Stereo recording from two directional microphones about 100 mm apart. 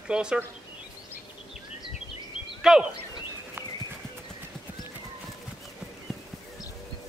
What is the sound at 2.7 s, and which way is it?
Speech, 5° right (ahead or behind).